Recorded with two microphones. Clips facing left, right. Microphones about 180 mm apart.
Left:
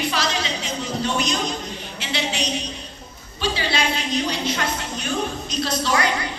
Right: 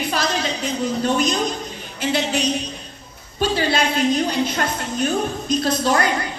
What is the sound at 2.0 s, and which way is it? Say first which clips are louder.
A woman's voice: right 6 dB; 50° right (ahead or behind).